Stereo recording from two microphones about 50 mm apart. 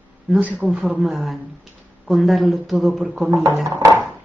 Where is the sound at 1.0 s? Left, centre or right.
Centre.